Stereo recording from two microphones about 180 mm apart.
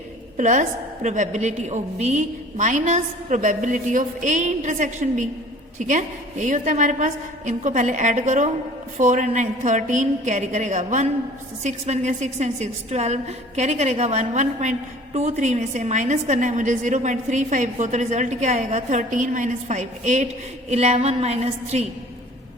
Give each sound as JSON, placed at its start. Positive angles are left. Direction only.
{"t": 0.3, "sound": "a woman's voice", "side_deg": -45}